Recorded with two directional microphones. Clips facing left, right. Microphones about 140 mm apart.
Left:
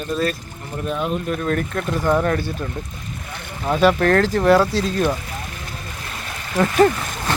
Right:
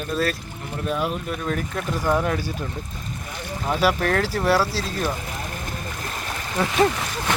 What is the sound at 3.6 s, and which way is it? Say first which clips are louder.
Speech: left 5 dB; 5° right (ahead or behind).